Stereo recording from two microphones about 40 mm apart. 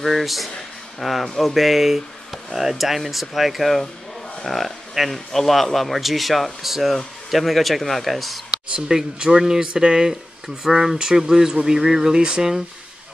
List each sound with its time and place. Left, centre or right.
0.0 s speech: centre
8.7 s speech: centre
10.6 s speech: centre
12.2 s speech: right